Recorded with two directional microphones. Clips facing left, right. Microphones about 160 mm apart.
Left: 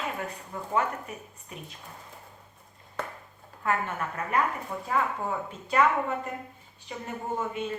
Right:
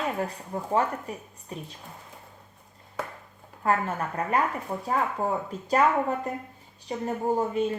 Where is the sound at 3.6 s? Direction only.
35° right (ahead or behind).